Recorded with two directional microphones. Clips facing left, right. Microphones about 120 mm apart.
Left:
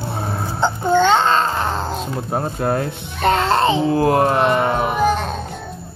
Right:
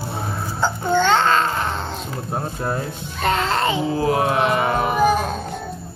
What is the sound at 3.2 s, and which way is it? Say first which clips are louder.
Music: left 4 dB; 30° left (ahead or behind).